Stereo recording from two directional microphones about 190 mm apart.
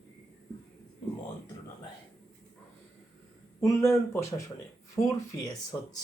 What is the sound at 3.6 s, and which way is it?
Speech, 15° left (ahead or behind).